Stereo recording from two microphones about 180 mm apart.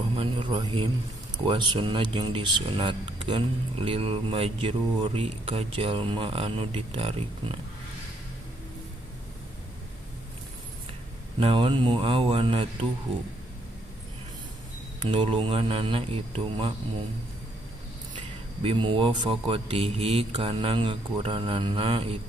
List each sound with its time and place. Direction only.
0.1 s a sound: 25° right (ahead or behind)
1.5 s speech: 25° right (ahead or behind)
11.3 s speech: 30° right (ahead or behind)
15.0 s speech: 30° right (ahead or behind)
18.1 s speech: 30° right (ahead or behind)